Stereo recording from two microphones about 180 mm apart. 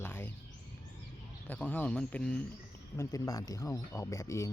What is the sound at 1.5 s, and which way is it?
Speech, 10° left (ahead or behind).